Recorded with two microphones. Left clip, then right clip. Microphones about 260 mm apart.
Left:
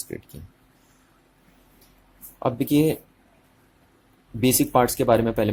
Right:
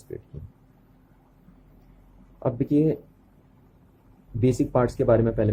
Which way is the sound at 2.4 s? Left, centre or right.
Centre.